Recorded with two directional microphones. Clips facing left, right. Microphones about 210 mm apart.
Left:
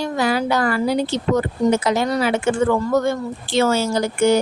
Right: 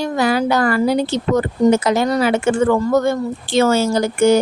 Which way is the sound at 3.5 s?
45° right (ahead or behind).